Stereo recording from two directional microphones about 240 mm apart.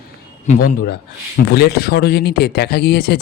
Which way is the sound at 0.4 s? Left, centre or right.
Left.